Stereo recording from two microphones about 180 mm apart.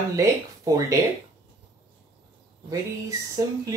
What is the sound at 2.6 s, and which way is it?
Speech, 20° right (ahead or behind).